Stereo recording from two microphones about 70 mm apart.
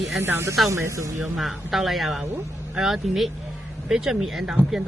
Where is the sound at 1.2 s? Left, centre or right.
Centre.